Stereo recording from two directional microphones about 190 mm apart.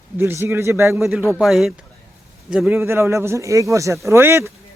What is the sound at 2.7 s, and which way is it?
Speech, 15° right (ahead or behind).